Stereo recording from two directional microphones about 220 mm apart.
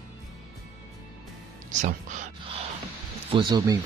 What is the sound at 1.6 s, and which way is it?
Music, 35° right (ahead or behind).